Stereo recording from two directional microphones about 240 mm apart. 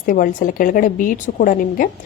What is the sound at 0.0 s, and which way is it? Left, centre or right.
A woman's voice, left.